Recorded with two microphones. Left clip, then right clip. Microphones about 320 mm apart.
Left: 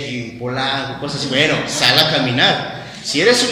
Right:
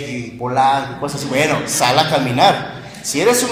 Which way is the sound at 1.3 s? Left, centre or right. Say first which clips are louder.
Even; centre.